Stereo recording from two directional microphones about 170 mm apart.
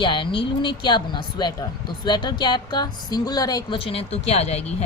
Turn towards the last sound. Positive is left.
turn(degrees=40)  # may be behind; listen again after turning